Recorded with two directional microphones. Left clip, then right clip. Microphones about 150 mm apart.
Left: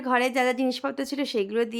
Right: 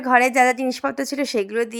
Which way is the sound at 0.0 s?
30° right (ahead or behind).